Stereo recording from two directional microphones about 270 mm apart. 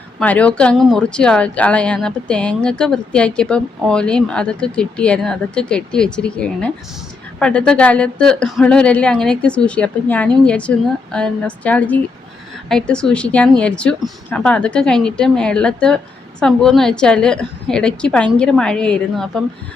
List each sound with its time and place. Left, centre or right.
0.2 s a woman's voice: centre